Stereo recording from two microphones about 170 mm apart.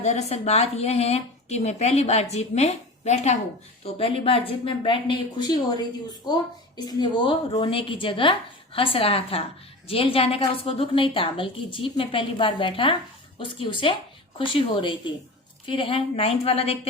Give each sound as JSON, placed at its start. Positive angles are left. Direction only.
{"t": 0.0, "sound": "a woman's voice", "side_deg": 40}